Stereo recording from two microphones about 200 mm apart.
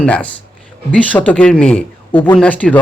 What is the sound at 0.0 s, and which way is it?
A man's voice, 5° left (ahead or behind).